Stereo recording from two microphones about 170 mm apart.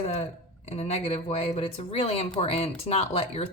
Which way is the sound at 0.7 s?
35° left (ahead or behind).